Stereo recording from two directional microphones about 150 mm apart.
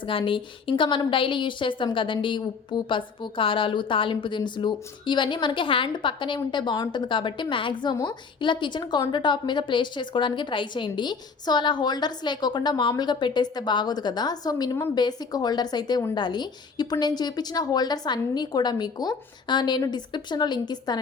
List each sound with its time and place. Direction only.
0.1 s a woman's voice: 35° left (ahead or behind)